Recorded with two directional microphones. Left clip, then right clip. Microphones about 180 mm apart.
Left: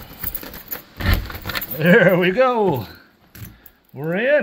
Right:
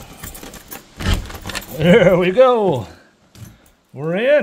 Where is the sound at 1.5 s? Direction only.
10° right (ahead or behind).